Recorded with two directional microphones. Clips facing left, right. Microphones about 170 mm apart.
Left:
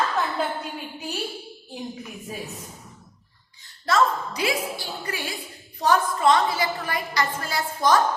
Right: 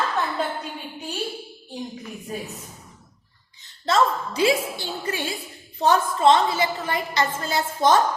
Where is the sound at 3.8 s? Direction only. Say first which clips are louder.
Right 1 dB; 25° right (ahead or behind).